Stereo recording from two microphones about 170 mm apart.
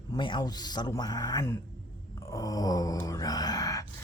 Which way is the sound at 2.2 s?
20° left (ahead or behind).